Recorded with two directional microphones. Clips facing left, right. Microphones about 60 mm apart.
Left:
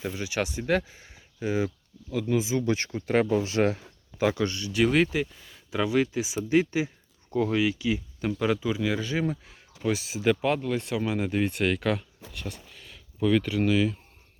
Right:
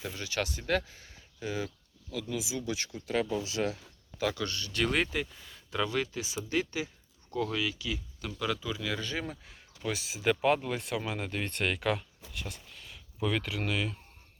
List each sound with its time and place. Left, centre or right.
0.0 s speech: centre
2.2 s speech: left
3.8 s speech: left; by 14.0 s centre